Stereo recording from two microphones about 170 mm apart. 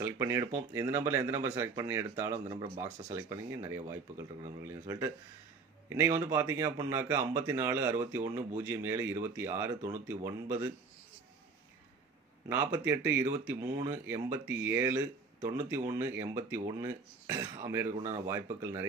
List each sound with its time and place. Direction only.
0.0 s speech: 15° right (ahead or behind)
2.4 s speech: 35° right (ahead or behind)
3.2 s speech: 20° right (ahead or behind)
12.4 s speech: 15° right (ahead or behind)